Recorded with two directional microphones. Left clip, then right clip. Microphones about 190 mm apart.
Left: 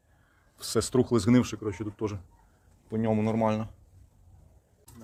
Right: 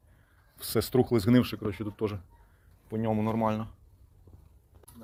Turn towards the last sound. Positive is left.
turn(degrees=25)  # may be behind; listen again after turning